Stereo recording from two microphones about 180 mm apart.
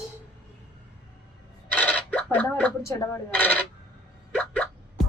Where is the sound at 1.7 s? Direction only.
10° left (ahead or behind).